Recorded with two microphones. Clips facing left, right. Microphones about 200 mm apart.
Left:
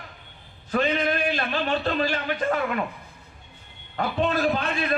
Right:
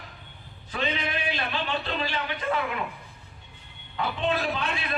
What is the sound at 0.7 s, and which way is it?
A man's voice, 50° left (ahead or behind).